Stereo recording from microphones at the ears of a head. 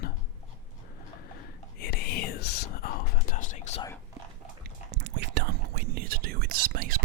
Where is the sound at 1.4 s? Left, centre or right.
Left.